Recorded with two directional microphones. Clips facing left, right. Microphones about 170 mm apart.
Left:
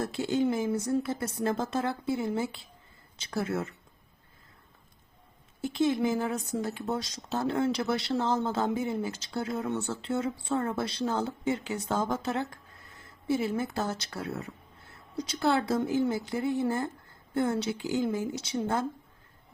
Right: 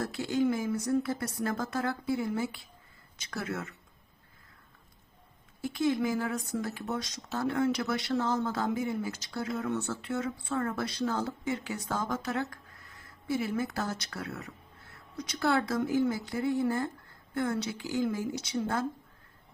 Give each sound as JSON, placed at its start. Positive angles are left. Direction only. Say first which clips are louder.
{"t": 0.0, "sound": "speech", "louder": "left 1 dB", "side_deg": 25}
{"t": 5.6, "sound": "speech", "louder": "left 2 dB", "side_deg": 25}